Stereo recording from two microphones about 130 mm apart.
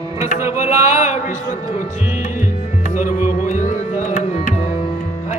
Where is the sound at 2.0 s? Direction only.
65° left (ahead or behind).